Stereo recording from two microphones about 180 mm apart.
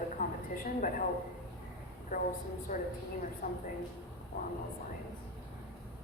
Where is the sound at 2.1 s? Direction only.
45° left (ahead or behind).